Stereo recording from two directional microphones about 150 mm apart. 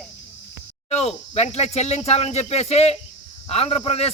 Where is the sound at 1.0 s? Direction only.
45° left (ahead or behind).